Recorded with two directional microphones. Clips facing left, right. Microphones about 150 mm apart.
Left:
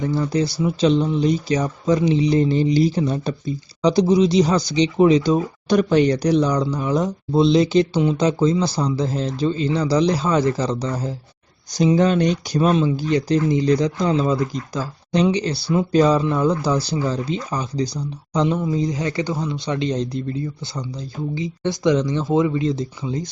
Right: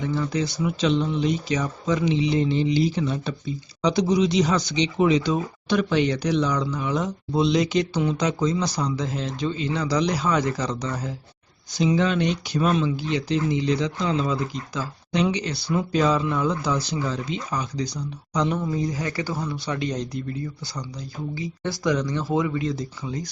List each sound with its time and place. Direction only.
0.0 s speech: 35° left (ahead or behind)
11.7 s speech: 40° left (ahead or behind)
18.6 s speech: 20° left (ahead or behind)
21.3 s speech: 20° left (ahead or behind)